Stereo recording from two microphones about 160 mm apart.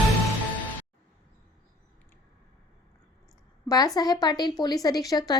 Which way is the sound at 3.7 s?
25° left (ahead or behind).